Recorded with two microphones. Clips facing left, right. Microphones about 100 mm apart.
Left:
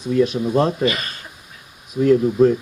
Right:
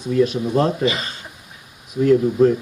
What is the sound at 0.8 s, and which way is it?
Speech, 20° right (ahead or behind).